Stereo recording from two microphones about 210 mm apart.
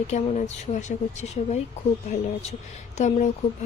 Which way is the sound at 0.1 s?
30° left (ahead or behind).